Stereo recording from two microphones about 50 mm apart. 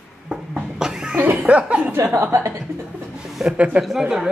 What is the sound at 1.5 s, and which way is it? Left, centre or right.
Speech, right.